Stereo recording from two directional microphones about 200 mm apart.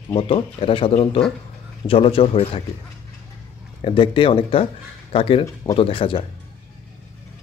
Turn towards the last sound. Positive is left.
turn(degrees=25)  # may be behind; listen again after turning